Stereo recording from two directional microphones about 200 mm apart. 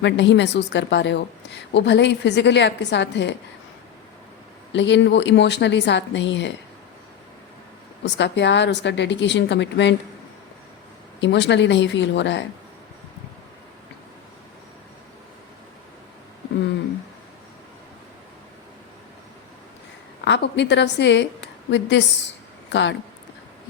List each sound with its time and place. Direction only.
0.0 s a woman's voice: 60° left (ahead or behind)
4.7 s a woman's voice: 65° left (ahead or behind)
8.0 s a woman's voice: 60° left (ahead or behind)
11.2 s a woman's voice: 60° left (ahead or behind)
20.2 s a woman's voice: 60° left (ahead or behind)